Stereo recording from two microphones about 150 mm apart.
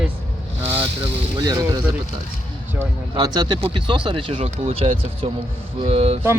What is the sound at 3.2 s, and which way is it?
Speech, 30° right (ahead or behind).